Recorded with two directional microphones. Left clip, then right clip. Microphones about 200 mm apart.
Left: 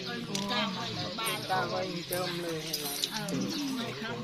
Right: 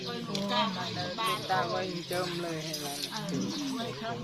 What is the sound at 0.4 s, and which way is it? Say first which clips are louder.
Music: right 3 dB; 40° right (ahead or behind).